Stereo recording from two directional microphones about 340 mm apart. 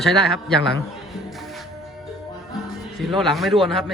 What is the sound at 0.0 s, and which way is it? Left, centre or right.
Speech, centre.